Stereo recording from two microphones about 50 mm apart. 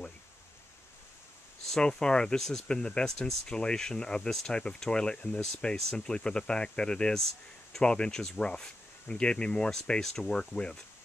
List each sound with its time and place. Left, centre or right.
1.7 s speech: centre